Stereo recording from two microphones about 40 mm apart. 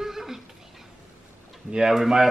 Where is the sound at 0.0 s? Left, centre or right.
Centre.